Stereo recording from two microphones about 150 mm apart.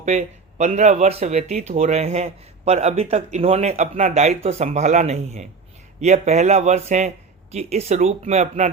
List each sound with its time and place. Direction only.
0.0 s speech: 50° right (ahead or behind)